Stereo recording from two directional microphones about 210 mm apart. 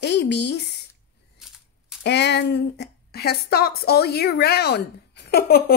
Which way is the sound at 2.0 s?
55° left (ahead or behind).